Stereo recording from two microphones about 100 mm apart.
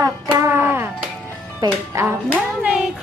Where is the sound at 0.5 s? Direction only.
20° right (ahead or behind).